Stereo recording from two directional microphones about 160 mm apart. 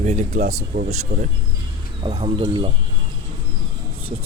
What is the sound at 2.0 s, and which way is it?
Speech, 35° right (ahead or behind).